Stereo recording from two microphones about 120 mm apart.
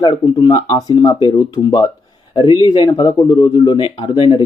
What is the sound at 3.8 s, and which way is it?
Speech, 45° left (ahead or behind).